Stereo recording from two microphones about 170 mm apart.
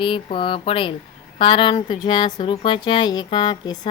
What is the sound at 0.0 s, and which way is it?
Speech, 30° left (ahead or behind).